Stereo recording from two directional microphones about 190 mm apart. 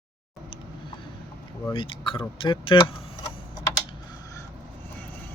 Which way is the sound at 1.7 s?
25° left (ahead or behind).